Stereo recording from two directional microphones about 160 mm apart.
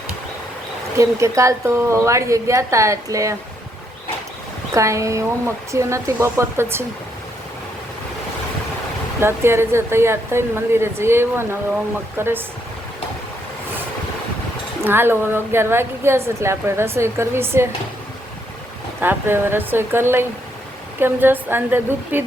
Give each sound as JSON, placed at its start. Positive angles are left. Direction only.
{"t": 0.9, "sound": "a woman's voice", "side_deg": -20}
{"t": 4.7, "sound": "a woman's voice", "side_deg": -20}
{"t": 9.2, "sound": "a woman's voice", "side_deg": -15}
{"t": 14.8, "sound": "a woman's voice", "side_deg": -15}
{"t": 19.0, "sound": "a woman's voice", "side_deg": -15}